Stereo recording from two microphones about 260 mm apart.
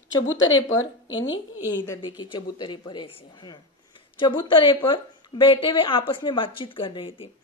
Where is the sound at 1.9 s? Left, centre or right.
Centre.